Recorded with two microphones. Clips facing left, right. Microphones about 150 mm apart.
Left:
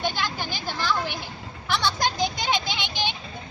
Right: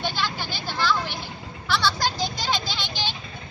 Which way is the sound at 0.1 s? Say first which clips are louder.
Even; 15° left (ahead or behind).